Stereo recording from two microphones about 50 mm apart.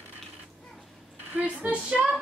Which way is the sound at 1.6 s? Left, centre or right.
Right.